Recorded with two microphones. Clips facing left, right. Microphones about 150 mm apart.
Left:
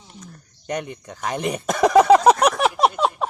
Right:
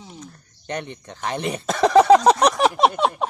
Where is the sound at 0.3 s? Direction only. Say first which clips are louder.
Left 3 dB; 10° left (ahead or behind).